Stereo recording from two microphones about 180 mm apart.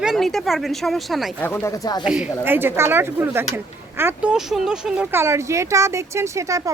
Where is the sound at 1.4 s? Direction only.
15° left (ahead or behind).